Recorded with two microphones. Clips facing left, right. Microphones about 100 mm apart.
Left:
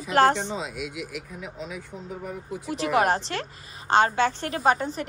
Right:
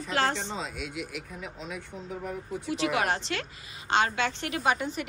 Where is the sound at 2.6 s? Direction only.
40° left (ahead or behind).